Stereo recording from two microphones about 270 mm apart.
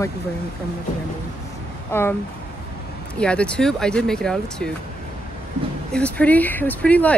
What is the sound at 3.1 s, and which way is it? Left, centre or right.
Speech, centre.